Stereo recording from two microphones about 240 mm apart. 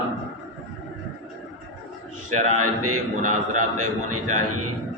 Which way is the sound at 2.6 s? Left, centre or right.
Right.